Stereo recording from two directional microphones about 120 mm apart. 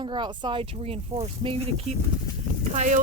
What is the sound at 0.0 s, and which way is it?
Speech, 40° right (ahead or behind).